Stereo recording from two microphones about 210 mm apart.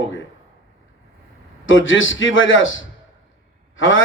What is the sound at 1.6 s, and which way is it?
A man's voice, 65° left (ahead or behind).